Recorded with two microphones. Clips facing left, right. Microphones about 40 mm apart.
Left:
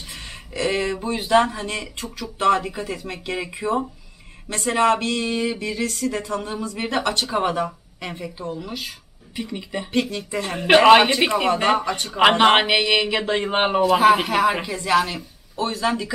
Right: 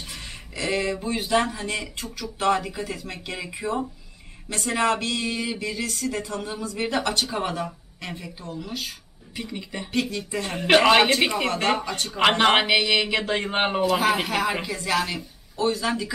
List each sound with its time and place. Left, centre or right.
0.1 s speech: centre
2.3 s speech: centre
3.6 s speech: left
15.5 s speech: left
15.8 s speech: centre